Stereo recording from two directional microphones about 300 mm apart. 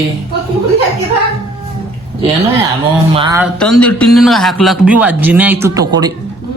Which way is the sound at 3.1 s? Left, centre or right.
Centre.